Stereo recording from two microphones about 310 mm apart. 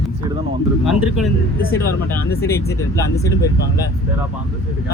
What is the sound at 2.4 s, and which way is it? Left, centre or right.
Speech, centre.